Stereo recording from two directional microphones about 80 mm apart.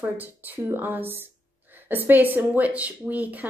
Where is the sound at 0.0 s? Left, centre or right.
Right.